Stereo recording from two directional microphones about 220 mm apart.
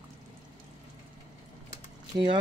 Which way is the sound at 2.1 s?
20° right (ahead or behind).